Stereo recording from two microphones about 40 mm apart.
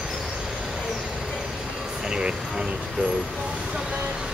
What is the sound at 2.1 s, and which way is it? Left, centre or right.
Speech, right.